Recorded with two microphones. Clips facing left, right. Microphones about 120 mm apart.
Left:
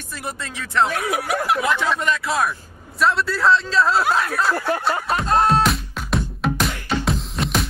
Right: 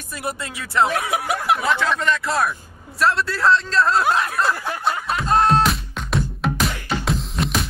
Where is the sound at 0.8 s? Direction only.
25° right (ahead or behind).